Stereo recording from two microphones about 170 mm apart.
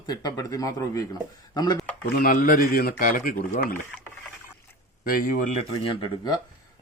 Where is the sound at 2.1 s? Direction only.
60° left (ahead or behind).